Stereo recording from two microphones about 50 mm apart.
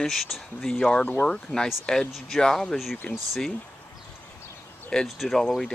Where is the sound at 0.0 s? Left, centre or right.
Centre.